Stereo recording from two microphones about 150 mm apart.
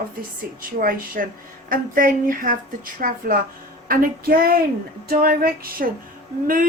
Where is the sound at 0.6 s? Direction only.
70° right (ahead or behind).